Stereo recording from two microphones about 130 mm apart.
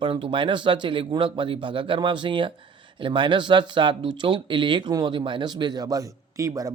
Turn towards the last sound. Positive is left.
turn(degrees=-25)  # may be behind; listen again after turning